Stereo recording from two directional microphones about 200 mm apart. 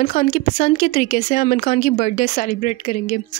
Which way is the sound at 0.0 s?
40° left (ahead or behind).